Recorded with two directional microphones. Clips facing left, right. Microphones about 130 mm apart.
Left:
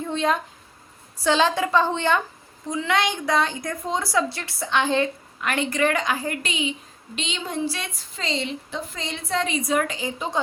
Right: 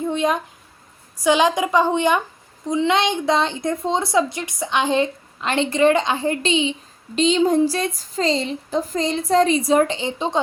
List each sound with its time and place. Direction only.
0.0 s a sound: 15° right (ahead or behind)
1.2 s a woman's voice: 15° right (ahead or behind)
7.2 s speech: 40° right (ahead or behind)